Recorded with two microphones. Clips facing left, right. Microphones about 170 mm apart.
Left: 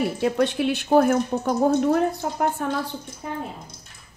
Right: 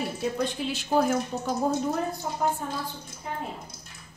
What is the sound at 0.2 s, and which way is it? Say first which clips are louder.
A woman's voice: left 7 dB; 70° left (ahead or behind).